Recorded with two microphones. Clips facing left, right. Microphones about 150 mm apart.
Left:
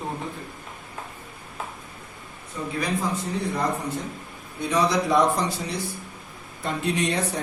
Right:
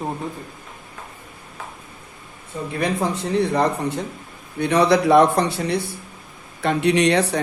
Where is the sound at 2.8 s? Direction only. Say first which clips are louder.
Right 5 dB; 70° right (ahead or behind).